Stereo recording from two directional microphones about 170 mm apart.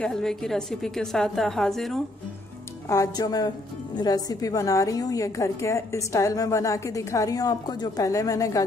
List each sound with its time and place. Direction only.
0.0 s a woman's voice: 5° left (ahead or behind)
2.9 s a woman's voice: 20° left (ahead or behind)